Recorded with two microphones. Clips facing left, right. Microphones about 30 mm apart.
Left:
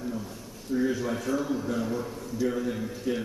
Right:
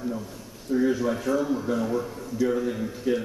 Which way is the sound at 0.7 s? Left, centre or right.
Centre.